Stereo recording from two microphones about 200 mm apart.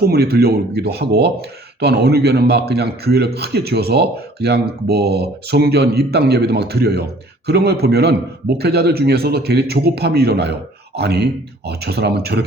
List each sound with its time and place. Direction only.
0.0 s speech: 50° right (ahead or behind)